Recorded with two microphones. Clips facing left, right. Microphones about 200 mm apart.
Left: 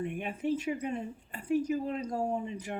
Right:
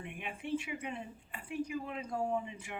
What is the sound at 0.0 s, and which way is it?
Speech, 40° left (ahead or behind).